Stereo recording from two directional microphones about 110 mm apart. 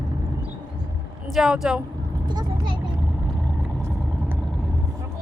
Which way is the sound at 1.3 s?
5° right (ahead or behind).